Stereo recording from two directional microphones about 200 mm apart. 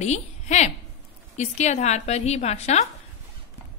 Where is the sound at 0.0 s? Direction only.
35° left (ahead or behind).